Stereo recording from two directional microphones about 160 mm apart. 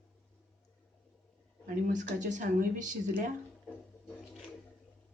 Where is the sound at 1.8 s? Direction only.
50° right (ahead or behind).